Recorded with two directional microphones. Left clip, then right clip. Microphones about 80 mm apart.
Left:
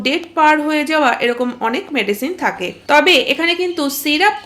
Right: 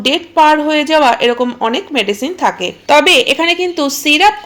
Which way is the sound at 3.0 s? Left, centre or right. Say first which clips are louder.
Right 2 dB; right.